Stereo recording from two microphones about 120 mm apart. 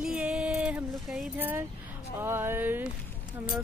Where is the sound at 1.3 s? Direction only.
15° right (ahead or behind).